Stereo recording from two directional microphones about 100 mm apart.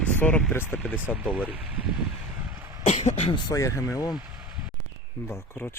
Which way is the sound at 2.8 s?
90° left.